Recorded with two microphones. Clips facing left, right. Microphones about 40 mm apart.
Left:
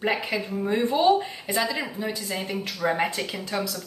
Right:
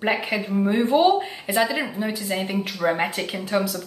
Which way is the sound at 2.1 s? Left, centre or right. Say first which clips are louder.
Right 4 dB; centre.